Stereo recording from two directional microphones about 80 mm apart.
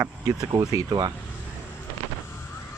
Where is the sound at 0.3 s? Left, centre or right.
Right.